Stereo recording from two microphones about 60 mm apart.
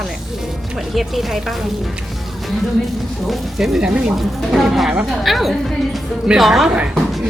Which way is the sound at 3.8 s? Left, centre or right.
Centre.